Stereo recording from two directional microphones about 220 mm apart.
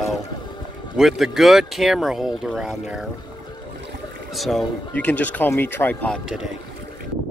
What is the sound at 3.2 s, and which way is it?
Music, 20° left (ahead or behind).